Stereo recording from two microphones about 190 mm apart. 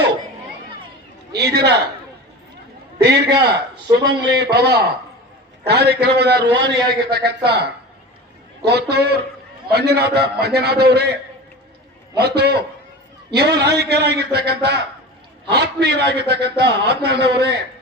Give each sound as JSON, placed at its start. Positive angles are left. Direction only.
{"t": 1.3, "sound": "a man's voice", "side_deg": -60}
{"t": 3.0, "sound": "a man's voice", "side_deg": -60}
{"t": 12.1, "sound": "a man's voice", "side_deg": -60}